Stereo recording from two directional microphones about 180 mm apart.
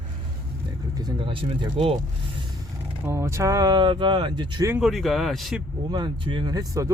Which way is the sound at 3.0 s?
15° right (ahead or behind).